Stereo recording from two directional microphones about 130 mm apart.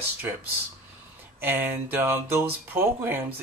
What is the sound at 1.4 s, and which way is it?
Speech, 15° right (ahead or behind).